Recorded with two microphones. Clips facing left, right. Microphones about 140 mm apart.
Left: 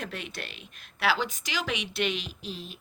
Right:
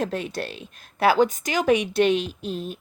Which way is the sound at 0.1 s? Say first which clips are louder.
Right 10 dB; 45° right (ahead or behind).